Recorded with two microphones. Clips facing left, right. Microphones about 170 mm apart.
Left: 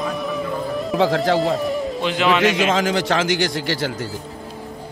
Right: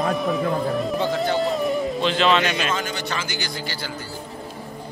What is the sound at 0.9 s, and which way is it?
Speech, 90° left.